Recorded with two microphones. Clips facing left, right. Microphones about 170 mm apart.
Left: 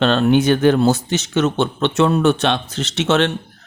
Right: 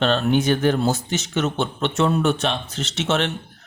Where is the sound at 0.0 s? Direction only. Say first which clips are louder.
Left 5 dB; 85° left.